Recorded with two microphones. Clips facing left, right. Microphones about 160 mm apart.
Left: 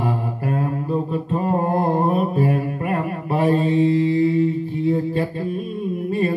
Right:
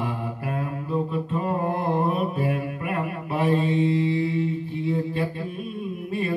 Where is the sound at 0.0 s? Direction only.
40° left (ahead or behind).